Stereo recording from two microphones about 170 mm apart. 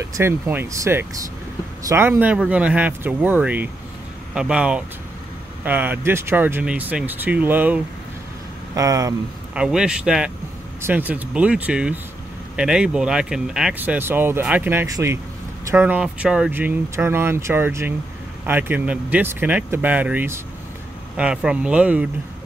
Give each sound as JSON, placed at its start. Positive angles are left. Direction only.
{"t": 0.1, "sound": "speech", "side_deg": -15}
{"t": 9.5, "sound": "speech", "side_deg": -5}